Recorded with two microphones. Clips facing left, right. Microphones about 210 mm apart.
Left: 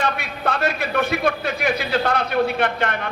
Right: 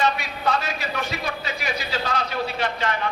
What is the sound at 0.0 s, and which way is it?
A man's voice, 55° left (ahead or behind).